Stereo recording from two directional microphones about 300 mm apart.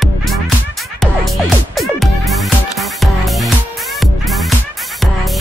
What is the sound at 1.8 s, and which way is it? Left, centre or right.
Music, centre.